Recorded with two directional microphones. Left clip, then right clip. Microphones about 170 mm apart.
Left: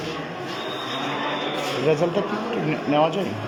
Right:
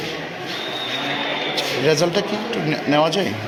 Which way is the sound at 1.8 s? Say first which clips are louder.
Right 3 dB; 10° right (ahead or behind).